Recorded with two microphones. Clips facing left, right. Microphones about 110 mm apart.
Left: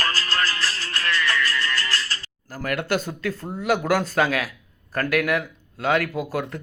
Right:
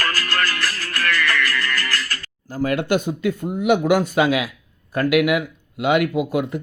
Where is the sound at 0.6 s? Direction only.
25° left (ahead or behind).